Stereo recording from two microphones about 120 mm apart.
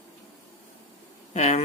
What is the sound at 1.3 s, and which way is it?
Speech, 70° left (ahead or behind).